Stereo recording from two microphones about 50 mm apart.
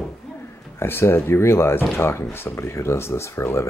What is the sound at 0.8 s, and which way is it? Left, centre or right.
Speech, left.